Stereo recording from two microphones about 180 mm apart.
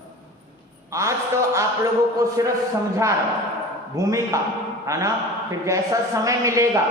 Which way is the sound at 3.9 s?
20° right (ahead or behind).